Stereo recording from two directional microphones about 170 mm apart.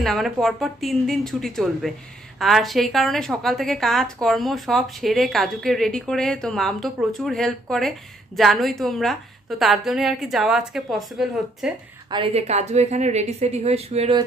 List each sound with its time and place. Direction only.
0.0 s speech: centre (ahead or behind)
12.1 s a woman's voice: 35° right (ahead or behind)